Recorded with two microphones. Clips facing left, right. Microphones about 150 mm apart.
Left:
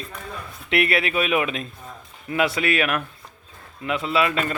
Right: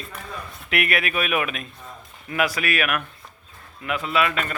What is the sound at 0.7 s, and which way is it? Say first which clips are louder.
A man's voice: left 3 dB; 30° left (ahead or behind).